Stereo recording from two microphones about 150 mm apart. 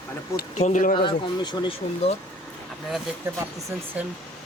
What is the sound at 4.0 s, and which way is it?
Speech, 10° right (ahead or behind).